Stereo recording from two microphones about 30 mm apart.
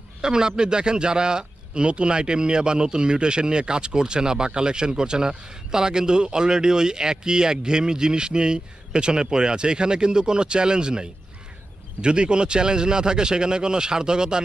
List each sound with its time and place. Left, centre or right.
0.2 s speech: right